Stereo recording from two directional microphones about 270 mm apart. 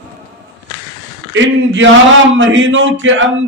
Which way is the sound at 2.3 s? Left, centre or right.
Right.